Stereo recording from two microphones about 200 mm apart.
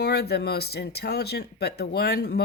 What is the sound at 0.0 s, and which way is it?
Speech, 55° left (ahead or behind).